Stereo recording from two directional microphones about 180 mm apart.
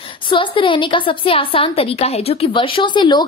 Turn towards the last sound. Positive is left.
turn(degrees=25)  # may be behind; listen again after turning